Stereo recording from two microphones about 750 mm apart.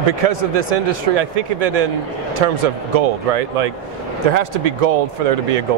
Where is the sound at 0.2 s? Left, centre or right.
Right.